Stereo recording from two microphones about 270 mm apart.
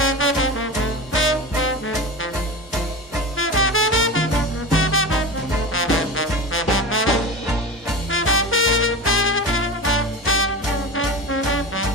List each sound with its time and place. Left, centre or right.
0.0 s music: left
3.3 s music: left
4.7 s swing music: left
8.1 s swing music: left
11.0 s music: left